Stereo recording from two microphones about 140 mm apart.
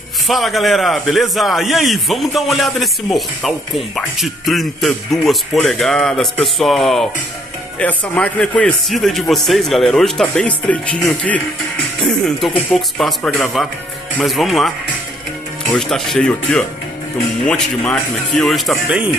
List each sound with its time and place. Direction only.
0.3 s a man's voice: centre (ahead or behind)
12.0 s a man's voice: centre (ahead or behind)